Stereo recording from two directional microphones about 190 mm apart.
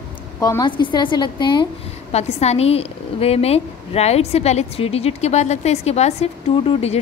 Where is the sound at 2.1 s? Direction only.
35° left (ahead or behind).